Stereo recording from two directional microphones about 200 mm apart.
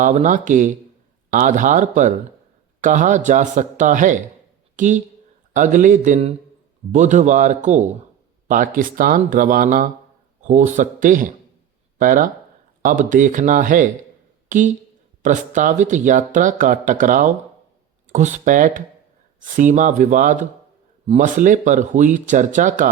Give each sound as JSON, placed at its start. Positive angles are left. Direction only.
{"t": 0.0, "sound": "speech", "side_deg": -40}